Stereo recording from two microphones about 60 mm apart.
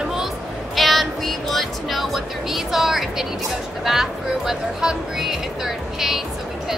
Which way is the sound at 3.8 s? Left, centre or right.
Centre.